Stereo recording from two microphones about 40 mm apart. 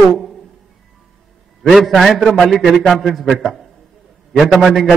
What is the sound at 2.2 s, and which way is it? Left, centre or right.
A man's voice, centre.